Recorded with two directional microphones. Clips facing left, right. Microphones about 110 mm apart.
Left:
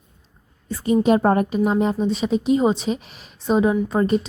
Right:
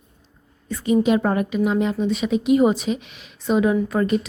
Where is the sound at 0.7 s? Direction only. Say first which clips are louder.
Left 1 dB; 35° left (ahead or behind).